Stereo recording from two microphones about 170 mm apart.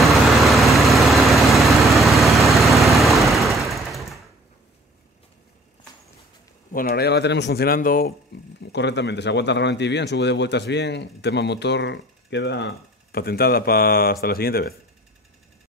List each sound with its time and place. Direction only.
0.0 s vehicle: centre (ahead or behind)
6.7 s speech: 60° left (ahead or behind)
8.5 s speech: 90° left; by 14.7 s 60° left (ahead or behind)